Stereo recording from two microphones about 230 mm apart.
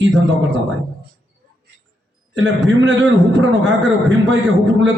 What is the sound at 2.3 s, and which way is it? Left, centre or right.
A man's voice, right.